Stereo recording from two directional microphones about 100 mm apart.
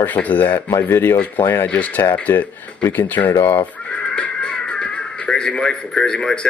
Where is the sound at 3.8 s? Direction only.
10° left (ahead or behind).